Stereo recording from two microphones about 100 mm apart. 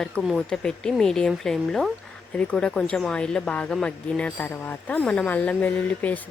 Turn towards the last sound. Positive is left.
turn(degrees=15)  # may be behind; listen again after turning